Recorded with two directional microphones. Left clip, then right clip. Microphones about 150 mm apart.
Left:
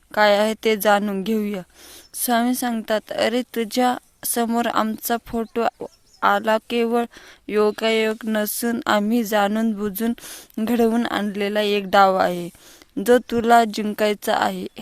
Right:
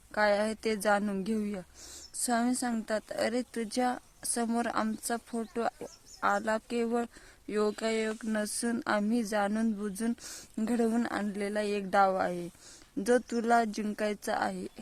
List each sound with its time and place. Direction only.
0.1 s speech: 35° left (ahead or behind)